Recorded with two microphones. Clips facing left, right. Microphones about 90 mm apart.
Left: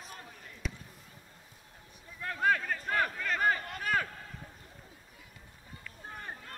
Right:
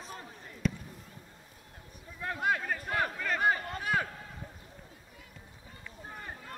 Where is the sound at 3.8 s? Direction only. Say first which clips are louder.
Even; 45° left (ahead or behind).